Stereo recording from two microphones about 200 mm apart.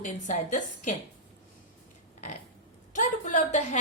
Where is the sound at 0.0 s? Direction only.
40° left (ahead or behind).